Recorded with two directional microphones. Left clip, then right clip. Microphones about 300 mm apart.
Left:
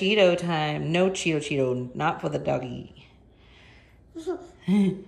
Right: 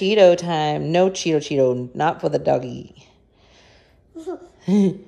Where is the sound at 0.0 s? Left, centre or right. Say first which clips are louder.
Right 7 dB; centre.